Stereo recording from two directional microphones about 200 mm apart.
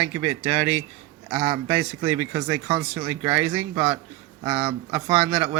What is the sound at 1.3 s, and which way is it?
Speech, 25° right (ahead or behind).